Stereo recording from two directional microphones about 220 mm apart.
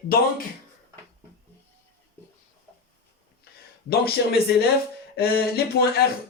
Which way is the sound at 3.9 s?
45° left (ahead or behind).